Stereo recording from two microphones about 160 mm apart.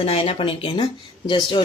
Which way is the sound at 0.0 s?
35° left (ahead or behind).